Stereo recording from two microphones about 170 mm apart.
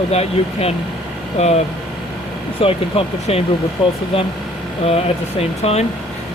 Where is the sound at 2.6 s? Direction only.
35° left (ahead or behind).